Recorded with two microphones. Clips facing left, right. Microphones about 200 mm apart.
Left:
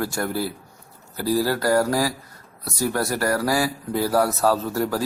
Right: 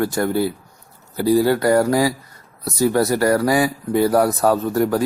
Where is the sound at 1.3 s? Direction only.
Centre (ahead or behind).